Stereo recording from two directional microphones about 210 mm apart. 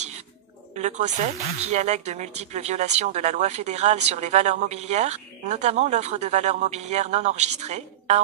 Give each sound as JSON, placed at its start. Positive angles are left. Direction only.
{"t": 0.7, "sound": "a woman's voice", "side_deg": -35}